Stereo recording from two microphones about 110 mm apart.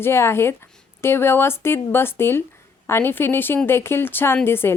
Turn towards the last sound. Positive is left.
turn(degrees=20)  # may be behind; listen again after turning